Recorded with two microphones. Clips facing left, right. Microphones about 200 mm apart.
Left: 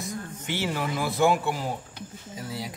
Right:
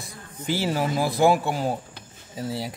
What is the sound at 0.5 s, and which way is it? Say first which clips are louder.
Speech: right 5 dB; 35° right (ahead or behind).